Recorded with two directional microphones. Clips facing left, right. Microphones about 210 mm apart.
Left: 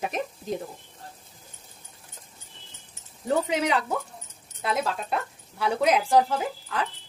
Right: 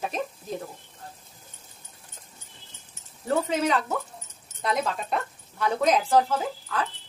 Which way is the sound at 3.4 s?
10° left (ahead or behind).